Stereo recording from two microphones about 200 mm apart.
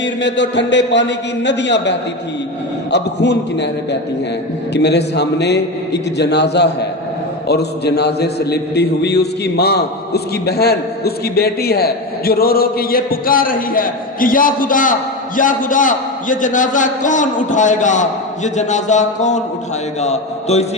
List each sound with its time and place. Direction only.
0.0 s a man's voice: 65° left (ahead or behind)
4.7 s a man's voice: 55° left (ahead or behind); by 20.7 s 35° left (ahead or behind)